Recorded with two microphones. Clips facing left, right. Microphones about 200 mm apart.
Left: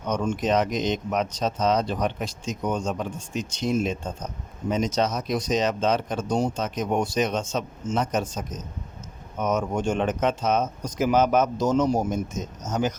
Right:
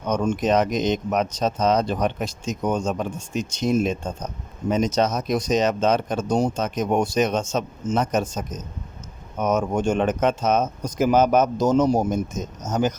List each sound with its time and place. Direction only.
0.1 s speech: 45° right (ahead or behind)